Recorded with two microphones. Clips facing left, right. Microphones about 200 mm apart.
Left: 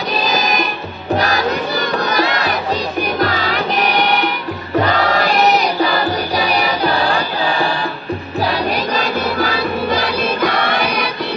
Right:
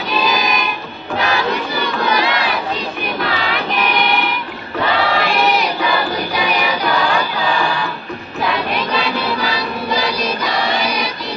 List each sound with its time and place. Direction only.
0.1 s music: 40° left (ahead or behind)
1.1 s crowd: 40° left (ahead or behind)
3.2 s music: 40° left (ahead or behind)
4.9 s choir: 45° left (ahead or behind)
6.3 s music: 40° left (ahead or behind); by 11.1 s 60° left (ahead or behind)